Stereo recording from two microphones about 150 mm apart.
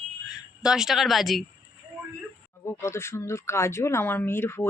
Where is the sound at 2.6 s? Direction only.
15° left (ahead or behind).